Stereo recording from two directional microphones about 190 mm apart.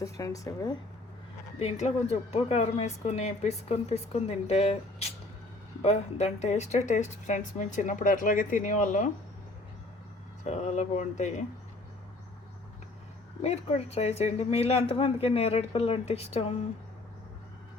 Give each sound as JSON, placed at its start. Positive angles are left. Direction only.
{"t": 0.0, "sound": "speech", "side_deg": 15}
{"t": 1.5, "sound": "speech", "side_deg": 35}
{"t": 10.4, "sound": "speech", "side_deg": 35}
{"t": 13.4, "sound": "speech", "side_deg": 35}